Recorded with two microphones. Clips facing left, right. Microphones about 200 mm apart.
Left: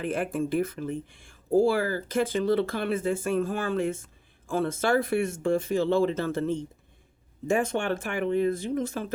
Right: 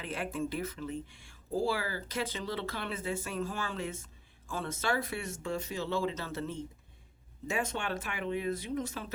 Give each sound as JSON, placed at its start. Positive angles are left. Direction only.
{"t": 0.0, "sound": "speech", "side_deg": 50}